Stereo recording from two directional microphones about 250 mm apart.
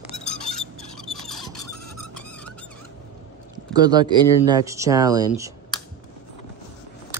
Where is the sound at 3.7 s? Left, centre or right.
Centre.